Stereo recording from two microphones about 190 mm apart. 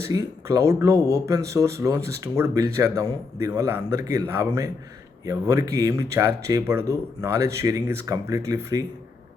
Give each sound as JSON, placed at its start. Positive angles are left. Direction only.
{"t": 0.0, "sound": "speech", "side_deg": -15}